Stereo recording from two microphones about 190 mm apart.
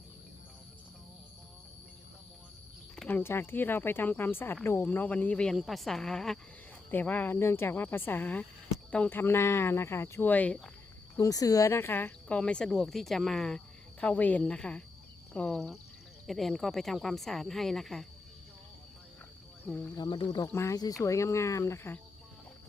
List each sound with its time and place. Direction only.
2.9 s speech: 5° left (ahead or behind)
11.2 s speech: 20° left (ahead or behind); by 18.0 s centre (ahead or behind)
19.6 s speech: 10° left (ahead or behind)
20.0 s speech: 25° left (ahead or behind)